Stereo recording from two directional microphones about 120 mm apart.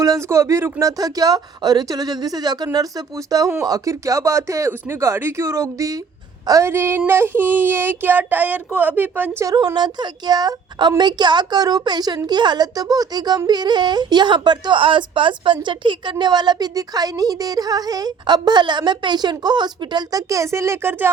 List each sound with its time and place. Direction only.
0.0 s a woman's voice: 25° right (ahead or behind)
9.4 s a woman's voice: 30° right (ahead or behind)